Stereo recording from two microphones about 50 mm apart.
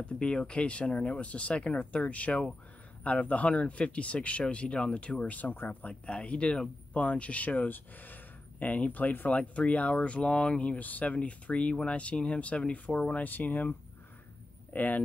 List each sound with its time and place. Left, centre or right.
0.0 s speech: left